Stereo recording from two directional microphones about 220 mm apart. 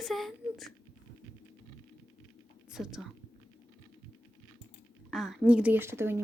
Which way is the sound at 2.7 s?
Centre (ahead or behind).